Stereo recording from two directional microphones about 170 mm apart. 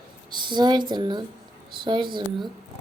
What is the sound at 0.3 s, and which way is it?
Speech, 25° right (ahead or behind).